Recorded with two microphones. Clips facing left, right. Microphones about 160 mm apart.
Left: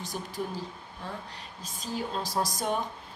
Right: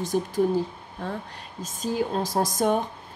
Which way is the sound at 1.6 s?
50° right (ahead or behind).